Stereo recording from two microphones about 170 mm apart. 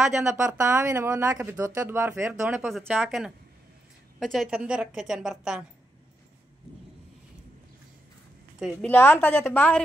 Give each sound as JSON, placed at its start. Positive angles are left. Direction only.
{"t": 0.2, "sound": "speech", "side_deg": -15}
{"t": 2.9, "sound": "a woman's voice", "side_deg": 0}
{"t": 8.8, "sound": "a woman's voice", "side_deg": 10}